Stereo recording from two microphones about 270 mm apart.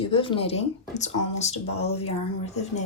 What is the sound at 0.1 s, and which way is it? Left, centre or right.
Speech, centre.